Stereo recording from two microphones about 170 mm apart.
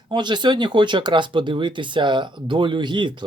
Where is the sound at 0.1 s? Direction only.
25° right (ahead or behind).